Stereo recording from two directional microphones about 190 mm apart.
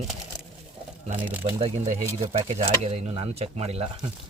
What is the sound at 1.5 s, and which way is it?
Speech, 30° right (ahead or behind).